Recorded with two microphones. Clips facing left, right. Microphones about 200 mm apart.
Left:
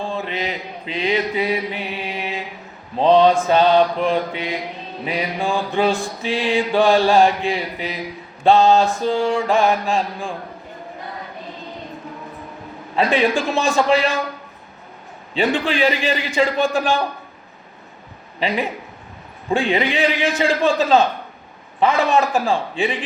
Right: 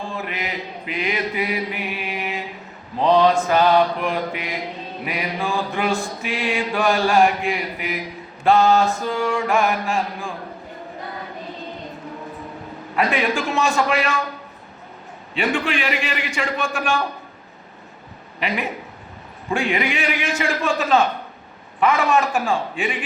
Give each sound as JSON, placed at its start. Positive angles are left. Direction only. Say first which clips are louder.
{"t": 0.0, "sound": "mantra", "louder": "left 4 dB", "side_deg": 30}
{"t": 13.0, "sound": "mantra", "louder": "left 3 dB", "side_deg": 30}
{"t": 15.4, "sound": "mantra", "louder": "left 4 dB", "side_deg": 35}
{"t": 18.3, "sound": "speech", "louder": "left 3 dB", "side_deg": 30}
{"t": 19.5, "sound": "mantra", "louder": "left 3 dB", "side_deg": 35}